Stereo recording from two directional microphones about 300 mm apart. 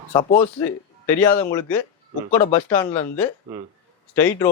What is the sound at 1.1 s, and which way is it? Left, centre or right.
Speech, left.